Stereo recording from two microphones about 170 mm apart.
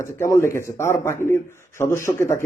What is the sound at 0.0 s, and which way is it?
Speech, 15° left (ahead or behind).